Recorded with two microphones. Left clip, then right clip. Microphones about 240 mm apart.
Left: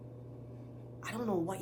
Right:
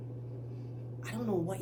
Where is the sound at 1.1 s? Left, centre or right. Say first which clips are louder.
Even; centre.